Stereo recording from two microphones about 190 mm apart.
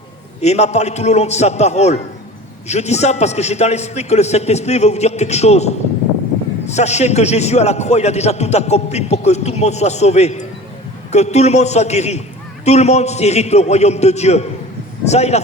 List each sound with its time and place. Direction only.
0.4 s a man's voice: 35° left (ahead or behind)